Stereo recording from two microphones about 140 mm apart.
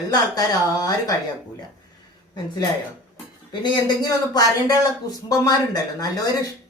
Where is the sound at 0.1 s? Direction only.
25° left (ahead or behind).